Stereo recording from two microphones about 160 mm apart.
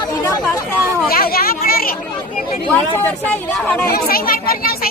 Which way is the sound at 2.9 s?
10° left (ahead or behind).